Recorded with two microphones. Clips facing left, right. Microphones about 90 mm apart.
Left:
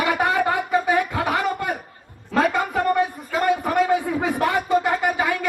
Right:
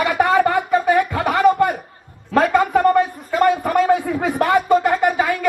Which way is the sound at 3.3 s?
55° right (ahead or behind).